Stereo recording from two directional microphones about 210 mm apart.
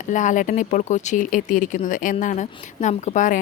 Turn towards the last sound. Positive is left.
turn(degrees=35)  # may be behind; listen again after turning